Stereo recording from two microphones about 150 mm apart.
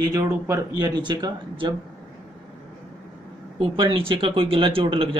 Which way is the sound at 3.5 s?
35° right (ahead or behind).